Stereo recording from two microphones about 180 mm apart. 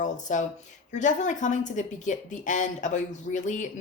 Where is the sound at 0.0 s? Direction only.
40° left (ahead or behind).